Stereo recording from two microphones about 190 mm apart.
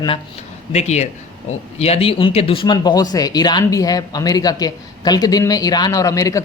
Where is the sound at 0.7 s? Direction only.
35° left (ahead or behind).